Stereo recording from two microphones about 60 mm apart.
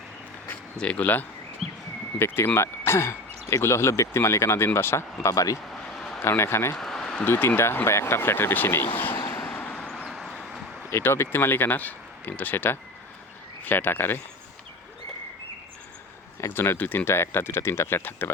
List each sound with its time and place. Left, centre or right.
0.8 s speech: left
1.6 s a sound: centre
2.1 s speech: left
5.2 s speech: left
5.7 s a sound: centre
6.2 s speech: left
6.7 s a sound: centre
7.3 s speech: left
9.1 s vehicle: left
9.5 s vehicle: left
9.7 s vehicle: centre
10.9 s speech: left
16.5 s speech: left
17.1 s speech: left